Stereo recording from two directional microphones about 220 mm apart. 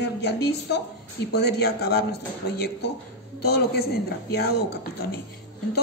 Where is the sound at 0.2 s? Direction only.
50° left (ahead or behind).